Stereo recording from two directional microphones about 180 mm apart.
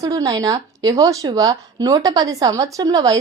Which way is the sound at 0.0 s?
20° right (ahead or behind).